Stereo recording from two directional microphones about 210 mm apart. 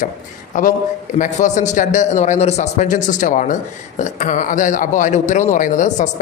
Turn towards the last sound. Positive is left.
turn(degrees=35)  # may be behind; listen again after turning